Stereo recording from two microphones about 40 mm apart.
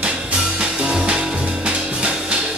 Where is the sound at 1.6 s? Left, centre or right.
Right.